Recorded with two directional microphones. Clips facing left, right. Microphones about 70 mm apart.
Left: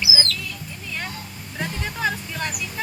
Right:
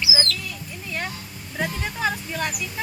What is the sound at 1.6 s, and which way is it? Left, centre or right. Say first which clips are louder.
Speech: right 1 dB; centre.